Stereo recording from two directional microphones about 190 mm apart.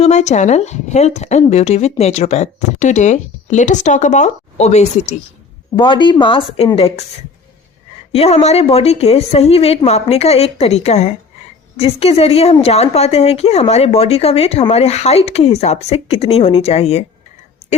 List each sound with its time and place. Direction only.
0.0 s a woman's voice: 35° left (ahead or behind)
5.7 s a woman's voice: 25° left (ahead or behind)
8.1 s a woman's voice: 35° left (ahead or behind)